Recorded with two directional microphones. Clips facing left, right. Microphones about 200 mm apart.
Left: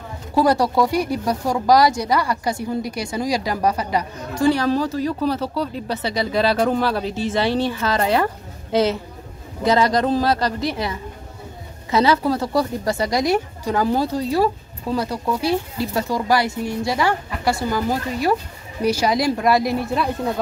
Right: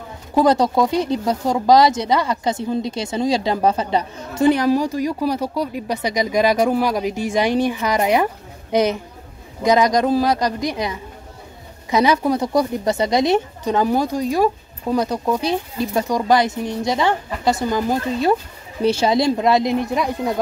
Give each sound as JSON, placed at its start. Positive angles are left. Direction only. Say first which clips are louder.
{"t": 0.3, "sound": "speech", "louder": "right 2 dB", "side_deg": -20}